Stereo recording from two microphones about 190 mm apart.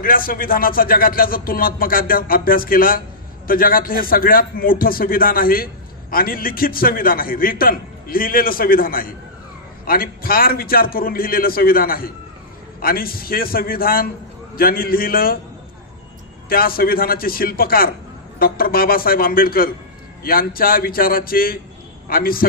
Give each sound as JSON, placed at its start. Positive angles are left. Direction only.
{"t": 0.0, "sound": "a man's voice", "side_deg": 50}
{"t": 16.4, "sound": "a man's voice", "side_deg": 50}